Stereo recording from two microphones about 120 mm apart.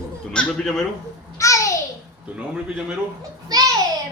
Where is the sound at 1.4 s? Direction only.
25° left (ahead or behind).